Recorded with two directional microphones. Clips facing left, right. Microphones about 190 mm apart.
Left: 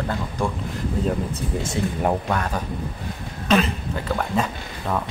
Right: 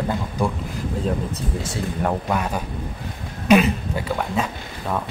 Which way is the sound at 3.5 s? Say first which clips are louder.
Right 4 dB; 10° right (ahead or behind).